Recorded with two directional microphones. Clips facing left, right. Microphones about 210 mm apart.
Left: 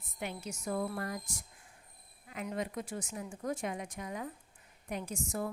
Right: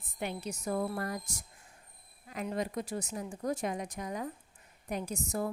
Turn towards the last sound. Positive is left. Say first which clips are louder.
# right 3 dB
turn(degrees=-40)  # may be behind; listen again after turning